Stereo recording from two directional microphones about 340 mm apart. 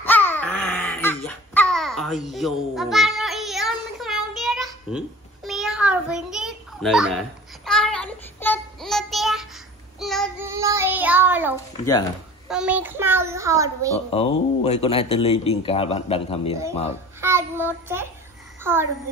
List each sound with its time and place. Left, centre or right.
0.0 s babbling: centre
9.9 s child singing: centre
12.4 s a child's voice: centre
13.9 s speech: centre
17.2 s child singing: centre
18.6 s a child's voice: centre